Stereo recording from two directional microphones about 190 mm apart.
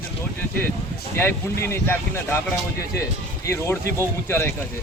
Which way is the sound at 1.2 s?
10° left (ahead or behind).